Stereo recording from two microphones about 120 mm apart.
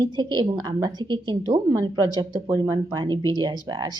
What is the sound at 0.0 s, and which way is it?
A woman's voice, 35° right (ahead or behind).